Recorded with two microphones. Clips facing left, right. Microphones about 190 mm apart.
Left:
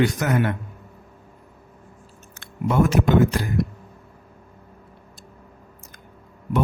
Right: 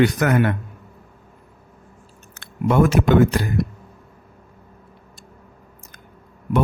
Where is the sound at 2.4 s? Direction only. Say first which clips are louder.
Right 3 dB; 70° right (ahead or behind).